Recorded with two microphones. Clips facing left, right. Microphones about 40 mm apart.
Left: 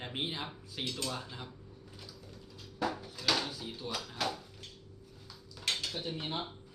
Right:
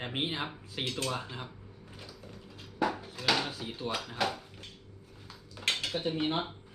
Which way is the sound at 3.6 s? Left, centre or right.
Right.